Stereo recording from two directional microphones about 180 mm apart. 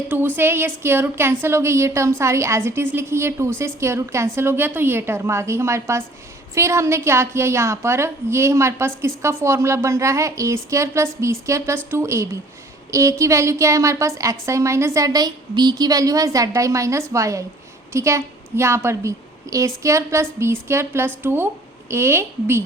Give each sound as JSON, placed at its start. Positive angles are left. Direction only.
{"t": 0.1, "sound": "a woman's voice", "side_deg": -10}